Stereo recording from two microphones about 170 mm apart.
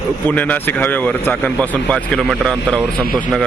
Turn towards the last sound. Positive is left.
turn(degrees=5)  # may be behind; listen again after turning